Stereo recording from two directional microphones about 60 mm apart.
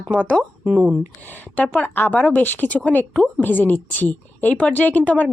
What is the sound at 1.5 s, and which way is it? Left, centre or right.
A woman's voice, left.